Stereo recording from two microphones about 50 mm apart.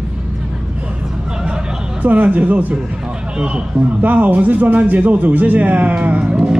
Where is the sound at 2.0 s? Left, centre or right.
Right.